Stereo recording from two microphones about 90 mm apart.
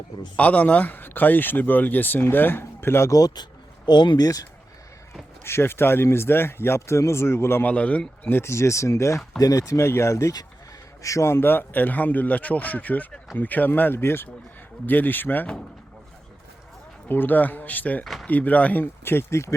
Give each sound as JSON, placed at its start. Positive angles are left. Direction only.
{"t": 0.3, "sound": "speech", "side_deg": 15}
{"t": 3.8, "sound": "speech", "side_deg": 55}
{"t": 5.4, "sound": "speech", "side_deg": 30}
{"t": 7.7, "sound": "speech", "side_deg": 15}
{"t": 17.1, "sound": "speech", "side_deg": 20}
{"t": 18.0, "sound": "speech", "side_deg": 0}
{"t": 18.3, "sound": "speech", "side_deg": 15}